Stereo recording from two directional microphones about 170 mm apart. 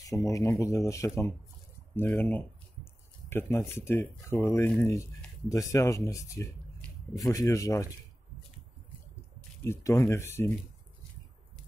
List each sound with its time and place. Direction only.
0.0 s speech: 20° left (ahead or behind)
9.7 s speech: 15° left (ahead or behind)